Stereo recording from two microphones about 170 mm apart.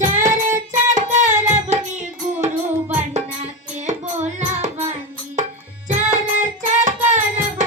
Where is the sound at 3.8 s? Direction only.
40° right (ahead or behind).